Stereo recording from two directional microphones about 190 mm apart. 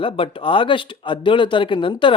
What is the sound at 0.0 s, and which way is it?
Speech, 30° left (ahead or behind).